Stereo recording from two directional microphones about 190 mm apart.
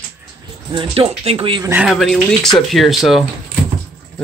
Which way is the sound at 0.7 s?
25° right (ahead or behind).